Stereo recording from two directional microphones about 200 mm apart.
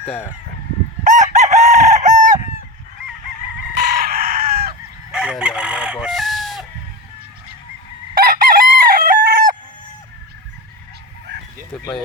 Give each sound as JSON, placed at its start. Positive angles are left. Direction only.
{"t": 0.0, "sound": "speech", "side_deg": 10}
{"t": 1.0, "sound": "chicken", "side_deg": -40}
{"t": 3.8, "sound": "chicken", "side_deg": -50}
{"t": 5.1, "sound": "chicken", "side_deg": -5}
{"t": 8.1, "sound": "chicken", "side_deg": -45}